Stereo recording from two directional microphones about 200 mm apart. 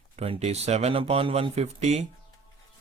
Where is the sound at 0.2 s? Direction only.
30° right (ahead or behind).